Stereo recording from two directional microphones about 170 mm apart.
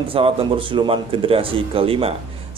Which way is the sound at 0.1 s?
30° right (ahead or behind).